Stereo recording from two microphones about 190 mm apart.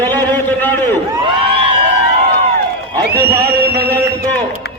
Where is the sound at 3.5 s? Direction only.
55° right (ahead or behind).